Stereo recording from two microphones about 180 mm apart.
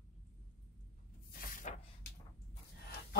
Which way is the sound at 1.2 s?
50° left (ahead or behind).